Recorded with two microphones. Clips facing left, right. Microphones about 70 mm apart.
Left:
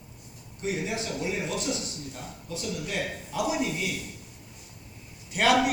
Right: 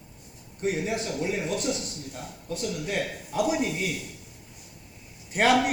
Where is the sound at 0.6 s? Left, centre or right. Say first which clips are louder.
Right 3 dB; right.